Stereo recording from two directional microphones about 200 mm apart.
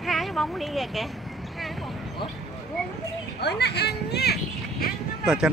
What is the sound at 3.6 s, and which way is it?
Speech, 55° left (ahead or behind).